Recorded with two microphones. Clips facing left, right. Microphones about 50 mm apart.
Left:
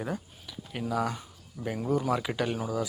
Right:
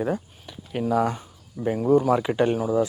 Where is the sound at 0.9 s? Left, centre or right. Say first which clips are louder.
Right 7 dB; right.